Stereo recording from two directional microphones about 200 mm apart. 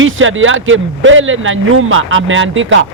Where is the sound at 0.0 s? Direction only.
75° right (ahead or behind).